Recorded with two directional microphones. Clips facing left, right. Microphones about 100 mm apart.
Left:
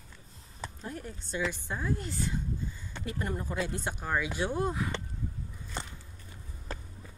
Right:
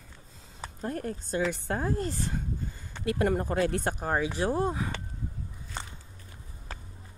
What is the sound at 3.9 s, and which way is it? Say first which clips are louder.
Speech: right 3 dB; 40° right (ahead or behind).